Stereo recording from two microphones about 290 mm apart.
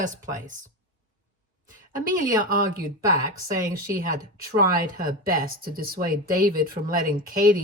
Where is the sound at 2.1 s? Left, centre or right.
Right.